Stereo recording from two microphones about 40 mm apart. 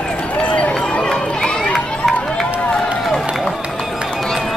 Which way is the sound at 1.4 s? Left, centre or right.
Left.